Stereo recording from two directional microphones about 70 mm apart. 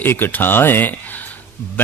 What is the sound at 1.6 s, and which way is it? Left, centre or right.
Speech, left.